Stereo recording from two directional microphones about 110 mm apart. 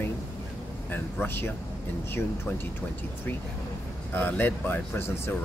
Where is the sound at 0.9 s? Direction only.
20° left (ahead or behind).